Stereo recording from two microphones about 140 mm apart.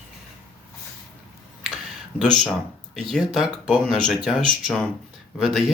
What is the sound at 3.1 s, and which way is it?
Speech, centre (ahead or behind).